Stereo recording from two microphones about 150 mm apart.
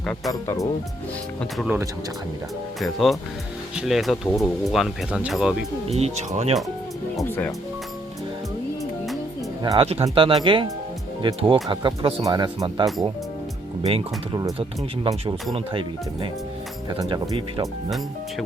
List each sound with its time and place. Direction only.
0.4 s speech: 20° left (ahead or behind)
1.5 s speech: 5° right (ahead or behind)
2.8 s speech: centre (ahead or behind)
5.9 s speech: 45° right (ahead or behind)
7.3 s speech: 15° left (ahead or behind)
9.7 s speech: 40° right (ahead or behind)
17.0 s speech: 30° right (ahead or behind)